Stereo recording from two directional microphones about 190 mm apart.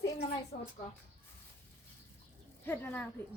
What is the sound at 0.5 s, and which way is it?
Speech, 55° left (ahead or behind).